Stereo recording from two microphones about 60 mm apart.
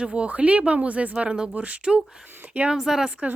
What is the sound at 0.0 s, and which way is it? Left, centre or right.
Speech, centre.